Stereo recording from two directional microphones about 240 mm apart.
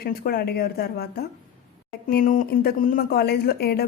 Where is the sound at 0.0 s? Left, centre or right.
Left.